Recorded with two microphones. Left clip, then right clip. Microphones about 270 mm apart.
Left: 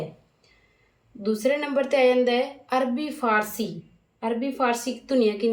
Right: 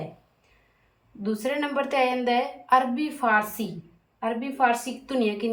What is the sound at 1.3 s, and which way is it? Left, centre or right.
A woman's voice, centre.